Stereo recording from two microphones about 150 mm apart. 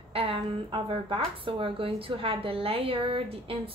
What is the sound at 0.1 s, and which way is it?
A woman's voice, 40° right (ahead or behind).